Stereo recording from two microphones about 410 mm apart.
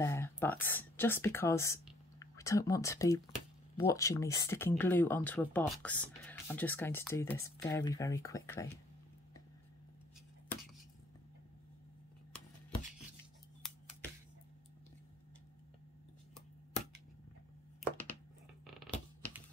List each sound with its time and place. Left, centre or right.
0.0 s speech: centre
18.7 s creak: centre